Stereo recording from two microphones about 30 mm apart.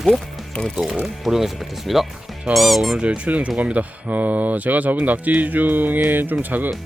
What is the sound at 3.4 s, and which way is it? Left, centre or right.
Speech, right.